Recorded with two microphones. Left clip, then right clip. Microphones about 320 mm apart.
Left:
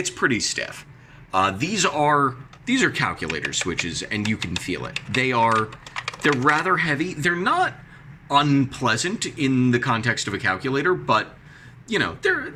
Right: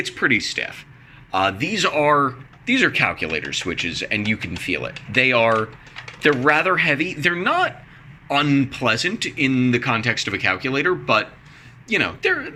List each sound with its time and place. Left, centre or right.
0.0 s speech: centre